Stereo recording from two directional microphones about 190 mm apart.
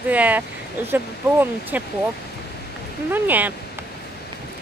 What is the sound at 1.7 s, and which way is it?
Speech, 10° right (ahead or behind).